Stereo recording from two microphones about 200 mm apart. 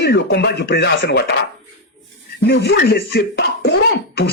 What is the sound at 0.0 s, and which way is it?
Speech, 60° left (ahead or behind).